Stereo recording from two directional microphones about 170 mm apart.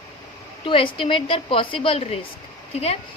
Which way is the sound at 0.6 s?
30° left (ahead or behind).